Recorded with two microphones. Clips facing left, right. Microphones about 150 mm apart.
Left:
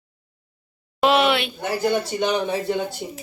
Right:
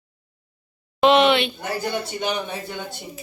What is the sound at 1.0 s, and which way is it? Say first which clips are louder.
Speech: right 2 dB; 5° left (ahead or behind).